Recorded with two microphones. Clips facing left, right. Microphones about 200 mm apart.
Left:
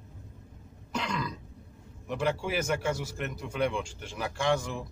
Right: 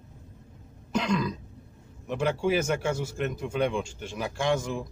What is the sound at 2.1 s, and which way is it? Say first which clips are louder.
A man's voice: right 4 dB; 25° right (ahead or behind).